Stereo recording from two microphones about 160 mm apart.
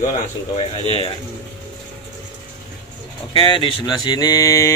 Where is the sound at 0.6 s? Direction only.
40° left (ahead or behind).